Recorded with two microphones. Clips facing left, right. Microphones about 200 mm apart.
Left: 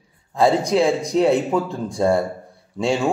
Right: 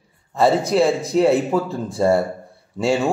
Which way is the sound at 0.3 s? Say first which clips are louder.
Even; 5° right (ahead or behind).